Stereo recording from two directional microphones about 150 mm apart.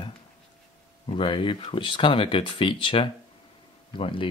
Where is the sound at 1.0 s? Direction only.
35° left (ahead or behind).